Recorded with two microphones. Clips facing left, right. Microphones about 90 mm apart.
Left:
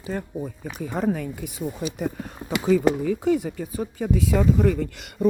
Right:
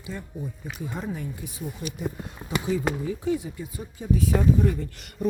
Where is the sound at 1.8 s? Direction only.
70° left (ahead or behind).